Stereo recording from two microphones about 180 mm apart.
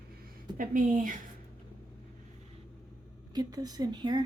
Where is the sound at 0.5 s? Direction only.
50° right (ahead or behind).